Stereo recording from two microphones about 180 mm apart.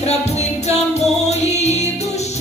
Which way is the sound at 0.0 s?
35° left (ahead or behind).